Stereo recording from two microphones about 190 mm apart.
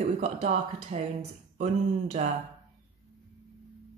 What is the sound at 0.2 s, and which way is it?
Speech, 35° right (ahead or behind).